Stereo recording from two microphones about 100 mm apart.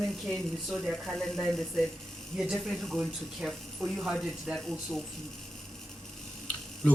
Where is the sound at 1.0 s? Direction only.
Centre (ahead or behind).